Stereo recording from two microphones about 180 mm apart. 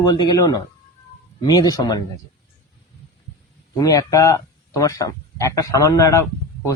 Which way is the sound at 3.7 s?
20° left (ahead or behind).